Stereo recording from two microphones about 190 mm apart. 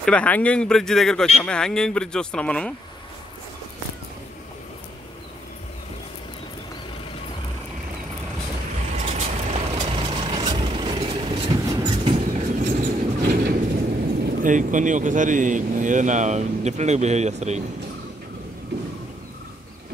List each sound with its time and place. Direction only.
0.0 s speech: 5° left (ahead or behind)
8.9 s vehicle: 35° right (ahead or behind)
14.3 s speech: 45° right (ahead or behind)